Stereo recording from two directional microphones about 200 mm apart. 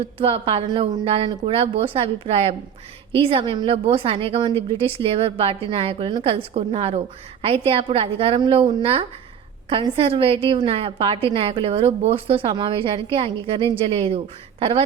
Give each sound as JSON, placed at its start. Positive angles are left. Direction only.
{"t": 0.2, "sound": "a woman's voice", "side_deg": -25}